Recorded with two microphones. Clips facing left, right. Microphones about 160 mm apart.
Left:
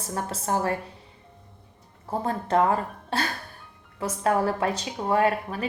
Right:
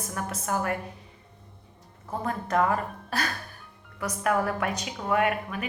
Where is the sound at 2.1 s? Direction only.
30° left (ahead or behind).